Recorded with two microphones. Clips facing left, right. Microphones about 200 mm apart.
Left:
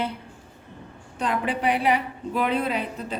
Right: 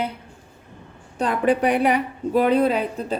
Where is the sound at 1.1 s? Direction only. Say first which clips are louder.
Right 6 dB; 40° right (ahead or behind).